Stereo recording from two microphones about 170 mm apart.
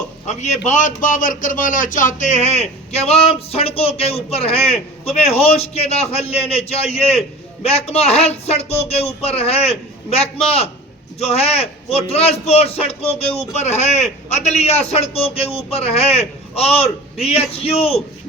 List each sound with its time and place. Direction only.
0.3 s a man's voice: 45° left (ahead or behind)